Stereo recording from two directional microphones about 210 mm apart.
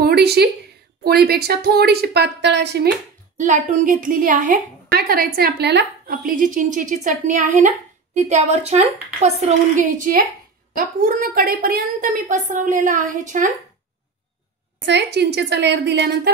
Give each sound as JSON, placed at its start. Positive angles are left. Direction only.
{"t": 0.0, "sound": "a sound", "side_deg": -50}
{"t": 1.0, "sound": "a woman's voice", "side_deg": -45}
{"t": 3.3, "sound": "a woman's voice", "side_deg": -35}
{"t": 14.9, "sound": "a woman's voice", "side_deg": -55}